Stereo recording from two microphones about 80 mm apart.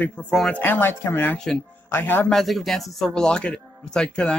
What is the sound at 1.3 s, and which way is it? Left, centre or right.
Speech, centre.